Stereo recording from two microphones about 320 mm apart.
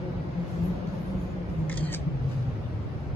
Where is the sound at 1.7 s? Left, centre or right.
Centre.